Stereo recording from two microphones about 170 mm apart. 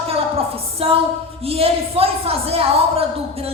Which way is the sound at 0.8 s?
35° right (ahead or behind).